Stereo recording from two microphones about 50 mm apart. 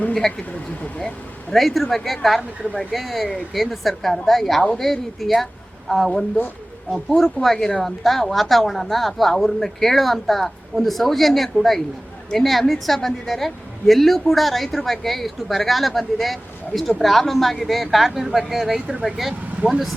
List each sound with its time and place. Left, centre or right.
0.1 s speech: centre
1.5 s a woman's voice: centre
7.4 s a woman's voice: centre